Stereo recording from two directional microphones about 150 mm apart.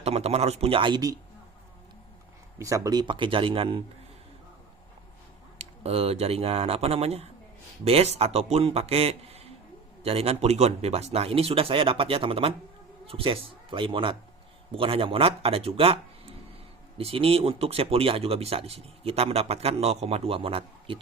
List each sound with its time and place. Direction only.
0.0 s speech: 45° right (ahead or behind)
2.6 s speech: 20° right (ahead or behind); by 3.8 s 35° right (ahead or behind)
5.5 s speech: 45° right (ahead or behind)
17.0 s speech: 40° right (ahead or behind)